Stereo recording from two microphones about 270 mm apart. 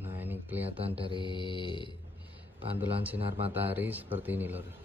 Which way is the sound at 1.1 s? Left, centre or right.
Centre.